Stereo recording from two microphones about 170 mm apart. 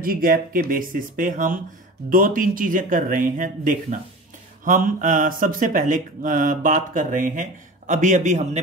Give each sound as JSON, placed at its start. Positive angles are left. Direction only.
{"t": 0.0, "sound": "speech", "side_deg": -60}